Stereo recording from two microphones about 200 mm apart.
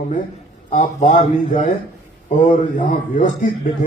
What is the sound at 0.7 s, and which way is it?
Speech, 35° left (ahead or behind).